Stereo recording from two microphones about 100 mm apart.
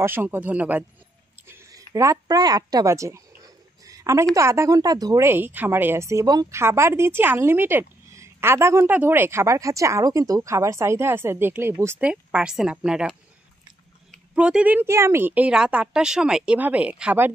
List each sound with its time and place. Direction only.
0.0 s a woman's voice: 20° right (ahead or behind)
2.0 s speech: 35° right (ahead or behind)
5.2 s a woman's voice: 20° right (ahead or behind)
12.0 s a woman's voice: 10° right (ahead or behind)
14.3 s a woman's voice: 10° right (ahead or behind)
14.9 s a woman's voice: 25° right (ahead or behind)